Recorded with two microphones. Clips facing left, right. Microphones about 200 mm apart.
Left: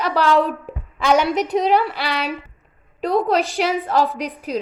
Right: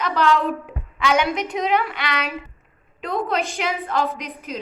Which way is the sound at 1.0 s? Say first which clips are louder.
Left 3 dB; 35° left (ahead or behind).